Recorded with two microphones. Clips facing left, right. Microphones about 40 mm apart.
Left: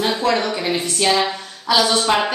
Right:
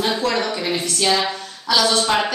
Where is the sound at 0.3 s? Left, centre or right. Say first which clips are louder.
Left 2 dB; centre.